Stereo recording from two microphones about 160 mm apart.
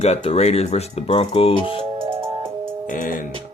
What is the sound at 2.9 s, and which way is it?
Music, 60° left (ahead or behind).